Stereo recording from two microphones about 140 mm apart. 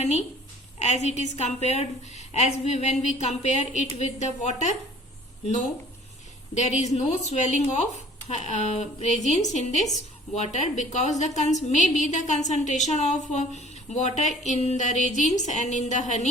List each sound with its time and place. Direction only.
0.0 s a woman's voice: 50° left (ahead or behind)
6.5 s a woman's voice: 55° left (ahead or behind)